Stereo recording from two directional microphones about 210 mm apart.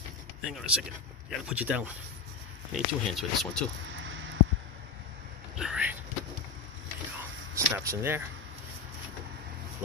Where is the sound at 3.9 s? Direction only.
65° right (ahead or behind).